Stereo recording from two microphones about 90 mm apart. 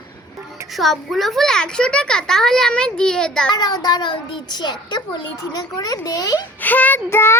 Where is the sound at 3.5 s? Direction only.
50° left (ahead or behind).